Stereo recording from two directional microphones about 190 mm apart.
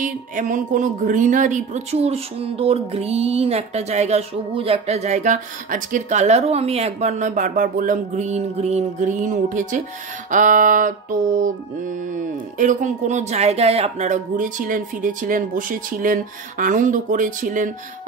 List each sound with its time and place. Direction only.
0.0 s speech: 45° right (ahead or behind)